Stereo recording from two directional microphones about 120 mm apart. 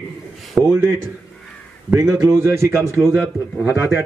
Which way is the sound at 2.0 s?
20° right (ahead or behind).